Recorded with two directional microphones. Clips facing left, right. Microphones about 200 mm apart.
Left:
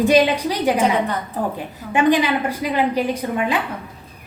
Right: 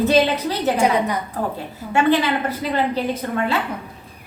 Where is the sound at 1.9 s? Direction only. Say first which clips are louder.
Left 1 dB; 15° left (ahead or behind).